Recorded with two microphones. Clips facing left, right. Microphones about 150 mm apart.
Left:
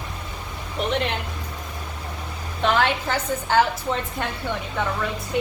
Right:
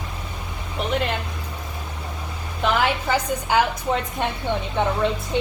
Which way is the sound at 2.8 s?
10° right (ahead or behind).